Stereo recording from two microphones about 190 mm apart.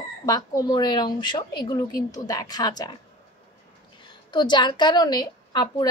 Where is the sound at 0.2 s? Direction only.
20° left (ahead or behind).